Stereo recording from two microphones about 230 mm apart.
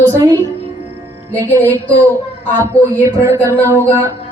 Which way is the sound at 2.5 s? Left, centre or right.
Centre.